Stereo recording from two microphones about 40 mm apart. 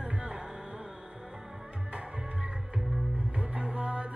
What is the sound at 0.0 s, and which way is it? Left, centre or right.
Music, right.